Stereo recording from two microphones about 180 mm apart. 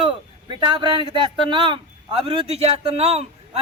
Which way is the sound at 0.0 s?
25° right (ahead or behind).